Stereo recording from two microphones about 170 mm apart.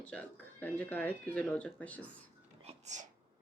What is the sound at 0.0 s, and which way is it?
Speech, 10° left (ahead or behind).